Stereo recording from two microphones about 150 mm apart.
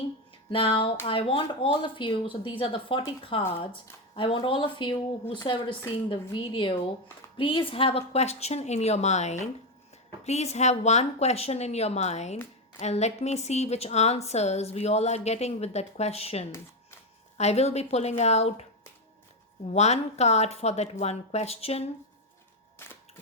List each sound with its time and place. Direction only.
0.5 s a woman's voice: 35° left (ahead or behind)
19.6 s a woman's voice: 45° left (ahead or behind)